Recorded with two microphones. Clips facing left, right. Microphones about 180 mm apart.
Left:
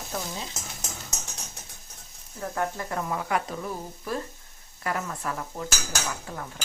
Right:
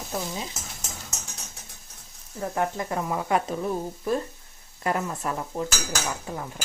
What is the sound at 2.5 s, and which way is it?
Speech, 20° right (ahead or behind).